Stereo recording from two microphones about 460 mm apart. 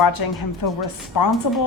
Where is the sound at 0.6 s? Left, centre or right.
Left.